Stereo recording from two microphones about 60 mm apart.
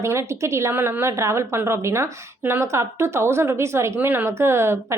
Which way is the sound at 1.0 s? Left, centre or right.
Right.